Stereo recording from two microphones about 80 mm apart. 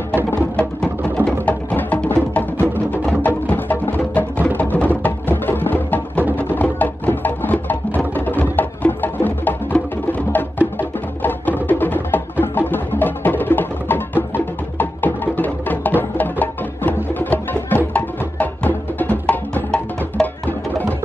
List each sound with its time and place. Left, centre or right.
0.6 s music: centre
20.2 s music: centre